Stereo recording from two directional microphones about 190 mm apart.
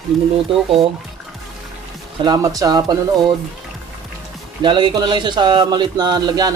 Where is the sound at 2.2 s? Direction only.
20° right (ahead or behind).